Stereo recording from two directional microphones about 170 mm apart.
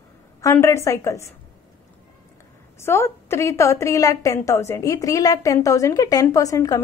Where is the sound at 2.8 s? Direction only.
15° left (ahead or behind).